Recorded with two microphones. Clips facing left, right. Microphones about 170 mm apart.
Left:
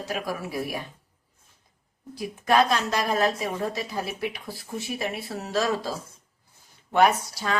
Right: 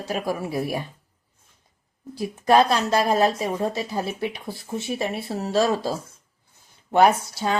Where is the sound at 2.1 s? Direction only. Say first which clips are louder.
Right 4 dB; 30° right (ahead or behind).